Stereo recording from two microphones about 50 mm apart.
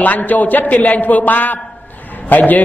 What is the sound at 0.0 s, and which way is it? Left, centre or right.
A man's voice, left.